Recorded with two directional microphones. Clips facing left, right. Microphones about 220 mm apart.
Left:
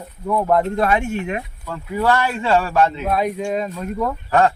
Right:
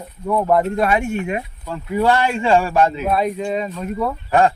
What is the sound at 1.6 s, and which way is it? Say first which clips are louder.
Speech: right 2 dB; 20° right (ahead or behind).